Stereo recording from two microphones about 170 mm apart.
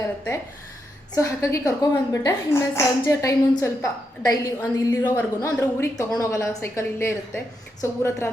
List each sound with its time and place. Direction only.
1.1 s a woman's voice: 20° left (ahead or behind)